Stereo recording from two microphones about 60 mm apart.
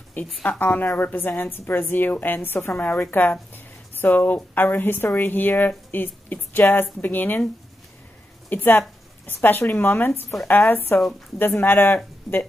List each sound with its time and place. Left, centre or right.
0.4 s speech: left
8.5 s a woman's voice: left